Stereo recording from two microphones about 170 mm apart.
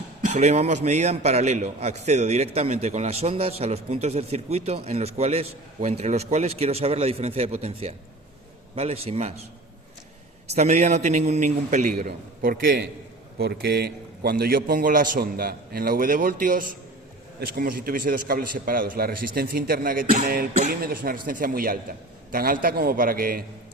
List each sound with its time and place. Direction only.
0.3 s a man's voice: 40° right (ahead or behind)
10.5 s a man's voice: 40° right (ahead or behind)
20.5 s a man's voice: 40° right (ahead or behind)
20.8 s a man's voice: 60° right (ahead or behind)